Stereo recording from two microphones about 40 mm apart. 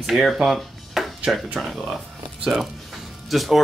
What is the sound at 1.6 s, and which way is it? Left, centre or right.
Speech, centre.